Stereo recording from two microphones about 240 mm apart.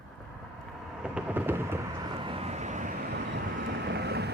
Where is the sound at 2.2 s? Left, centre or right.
Right.